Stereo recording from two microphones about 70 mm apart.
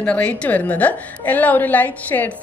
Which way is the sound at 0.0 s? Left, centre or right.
Centre.